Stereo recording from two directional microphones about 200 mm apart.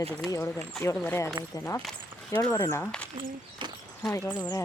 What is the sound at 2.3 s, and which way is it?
Speech, 10° left (ahead or behind).